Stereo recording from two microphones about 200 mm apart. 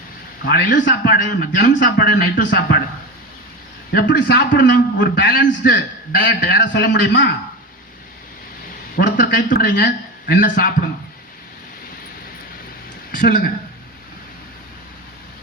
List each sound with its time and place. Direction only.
0.4 s a man's voice: 45° left (ahead or behind)
3.9 s a man's voice: 50° left (ahead or behind)
5.3 s a man's voice: 45° left (ahead or behind); by 7.2 s 60° left (ahead or behind)
9.0 s a sound: 55° left (ahead or behind)
9.5 s a man's voice: 50° left (ahead or behind)
13.1 s a sound: 45° left (ahead or behind)